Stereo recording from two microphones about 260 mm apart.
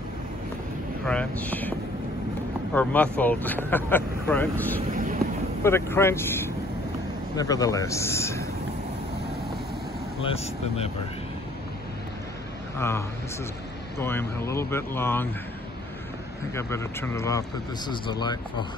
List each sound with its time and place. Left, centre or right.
1.0 s speech: centre
10.2 s speech: left
12.7 s speech: centre
16.5 s speech: centre